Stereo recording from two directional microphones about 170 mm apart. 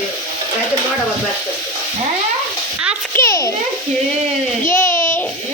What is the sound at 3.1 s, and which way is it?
Speech, 15° left (ahead or behind).